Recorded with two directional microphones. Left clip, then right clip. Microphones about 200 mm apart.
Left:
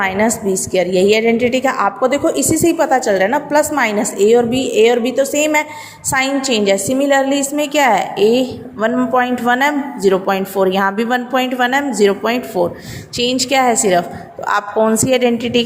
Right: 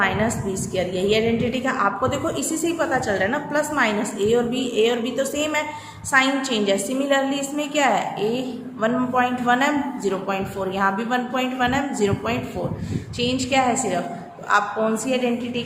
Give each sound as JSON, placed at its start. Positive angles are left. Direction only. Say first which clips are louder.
{"t": 0.0, "sound": "a woman's voice", "louder": "left 6 dB", "side_deg": 35}